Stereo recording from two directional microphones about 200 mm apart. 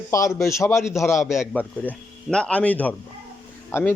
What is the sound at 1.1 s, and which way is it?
Speech, centre (ahead or behind).